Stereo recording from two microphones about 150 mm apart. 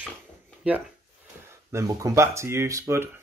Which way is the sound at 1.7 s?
20° right (ahead or behind).